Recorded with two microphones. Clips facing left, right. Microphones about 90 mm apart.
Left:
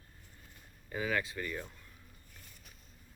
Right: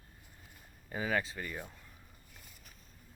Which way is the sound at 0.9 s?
30° right (ahead or behind).